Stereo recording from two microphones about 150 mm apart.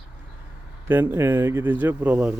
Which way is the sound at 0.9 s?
15° right (ahead or behind).